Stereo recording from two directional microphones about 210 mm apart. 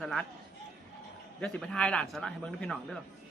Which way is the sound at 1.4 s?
5° left (ahead or behind).